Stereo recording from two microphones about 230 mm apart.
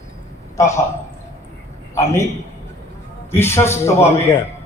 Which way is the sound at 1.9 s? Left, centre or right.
Centre.